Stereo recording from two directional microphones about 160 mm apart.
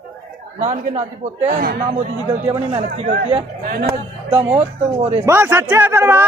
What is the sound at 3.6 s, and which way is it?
Speech, 75° right (ahead or behind).